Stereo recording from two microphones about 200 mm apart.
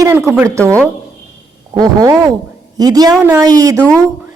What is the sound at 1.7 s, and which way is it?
Speech, 20° right (ahead or behind).